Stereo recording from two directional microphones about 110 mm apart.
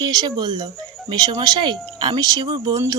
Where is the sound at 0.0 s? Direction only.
40° right (ahead or behind).